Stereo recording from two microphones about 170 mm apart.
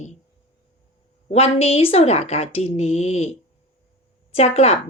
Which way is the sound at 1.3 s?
35° left (ahead or behind).